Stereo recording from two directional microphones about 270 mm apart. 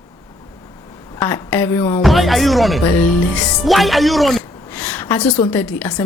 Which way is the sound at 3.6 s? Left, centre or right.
Centre.